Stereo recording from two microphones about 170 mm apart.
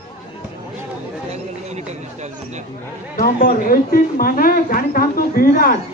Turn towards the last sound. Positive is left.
turn(degrees=60)  # may be behind; listen again after turning